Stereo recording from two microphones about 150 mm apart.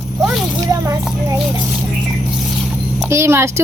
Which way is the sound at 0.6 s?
20° right (ahead or behind).